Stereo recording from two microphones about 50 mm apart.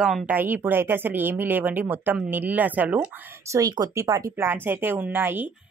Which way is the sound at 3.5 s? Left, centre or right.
Right.